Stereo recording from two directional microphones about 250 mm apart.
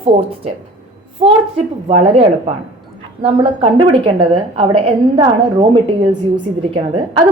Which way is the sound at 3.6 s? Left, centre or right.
Right.